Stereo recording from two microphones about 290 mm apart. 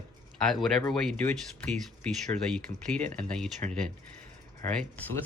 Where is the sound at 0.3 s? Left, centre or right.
Centre.